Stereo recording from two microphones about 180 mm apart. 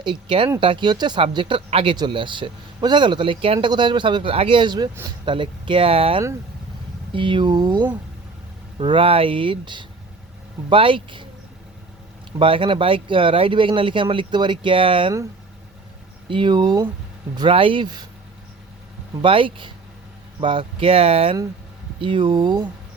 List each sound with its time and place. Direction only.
0.0 s speech: 25° right (ahead or behind)
12.4 s speech: 30° right (ahead or behind)
16.3 s speech: 25° right (ahead or behind)
19.2 s speech: 30° right (ahead or behind)